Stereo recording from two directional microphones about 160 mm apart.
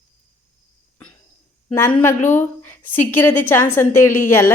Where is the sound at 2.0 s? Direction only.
15° left (ahead or behind).